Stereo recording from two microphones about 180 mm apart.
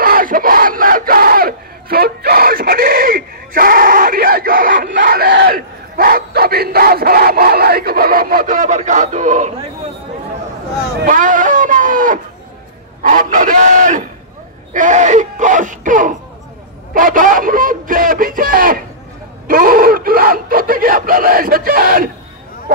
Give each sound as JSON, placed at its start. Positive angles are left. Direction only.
{"t": 0.0, "sound": "crowd", "side_deg": -55}
{"t": 11.1, "sound": "a sound", "side_deg": -45}
{"t": 19.4, "sound": "screaming", "side_deg": -50}